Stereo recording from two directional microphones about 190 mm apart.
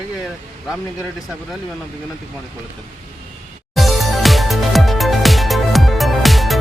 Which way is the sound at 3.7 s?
Centre (ahead or behind).